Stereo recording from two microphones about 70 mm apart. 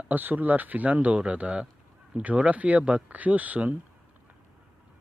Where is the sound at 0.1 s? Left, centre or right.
Right.